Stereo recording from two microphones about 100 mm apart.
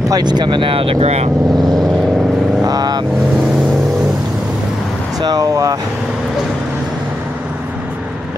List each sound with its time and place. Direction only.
0.1 s speech: 45° right (ahead or behind); by 0.9 s 65° right (ahead or behind)
1.0 s speech: 90° right
2.6 s vehicle: 40° right (ahead or behind)
5.2 s speech: 40° right (ahead or behind)